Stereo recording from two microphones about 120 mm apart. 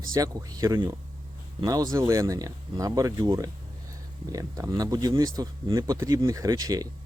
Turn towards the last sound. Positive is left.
turn(degrees=-30)  # may be behind; listen again after turning